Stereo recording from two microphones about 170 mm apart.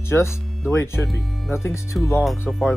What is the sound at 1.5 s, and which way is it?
Speech, 15° left (ahead or behind).